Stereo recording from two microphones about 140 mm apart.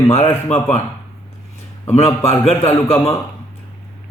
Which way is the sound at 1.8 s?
50° left (ahead or behind).